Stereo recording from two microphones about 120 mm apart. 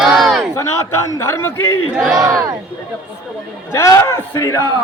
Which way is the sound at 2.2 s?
25° right (ahead or behind).